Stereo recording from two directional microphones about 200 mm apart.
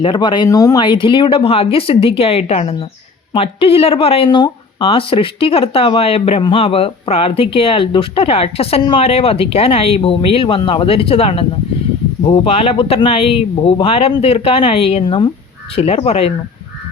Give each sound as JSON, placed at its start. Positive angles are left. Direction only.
{"t": 0.0, "sound": "speech", "side_deg": 25}